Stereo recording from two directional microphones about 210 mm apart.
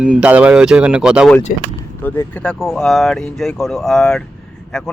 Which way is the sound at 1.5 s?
40° left (ahead or behind).